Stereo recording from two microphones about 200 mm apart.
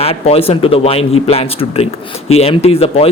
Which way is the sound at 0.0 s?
30° left (ahead or behind).